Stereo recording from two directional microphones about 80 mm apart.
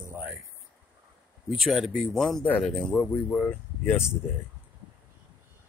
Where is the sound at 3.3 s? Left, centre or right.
Centre.